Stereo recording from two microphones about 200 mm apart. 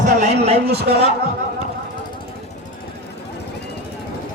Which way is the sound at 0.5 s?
55° right (ahead or behind).